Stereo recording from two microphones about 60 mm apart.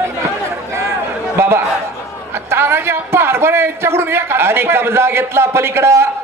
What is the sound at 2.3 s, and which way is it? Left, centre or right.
A man's voice, right.